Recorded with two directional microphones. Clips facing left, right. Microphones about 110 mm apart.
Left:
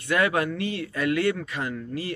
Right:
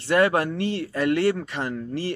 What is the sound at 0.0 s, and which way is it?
Speech, 35° right (ahead or behind).